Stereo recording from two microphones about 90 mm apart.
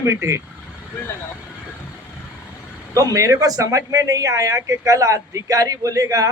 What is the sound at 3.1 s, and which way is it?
Speech, 35° right (ahead or behind).